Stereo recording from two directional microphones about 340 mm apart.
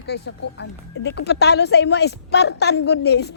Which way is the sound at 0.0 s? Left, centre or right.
Left.